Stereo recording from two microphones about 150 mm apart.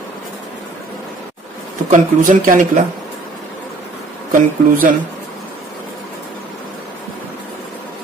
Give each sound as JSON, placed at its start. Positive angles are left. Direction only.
{"t": 1.9, "sound": "speech", "side_deg": -60}
{"t": 4.3, "sound": "speech", "side_deg": -60}